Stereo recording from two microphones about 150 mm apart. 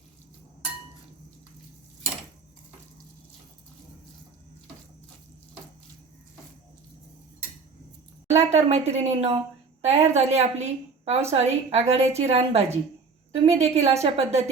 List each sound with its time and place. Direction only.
8.3 s a woman's voice: 45° right (ahead or behind)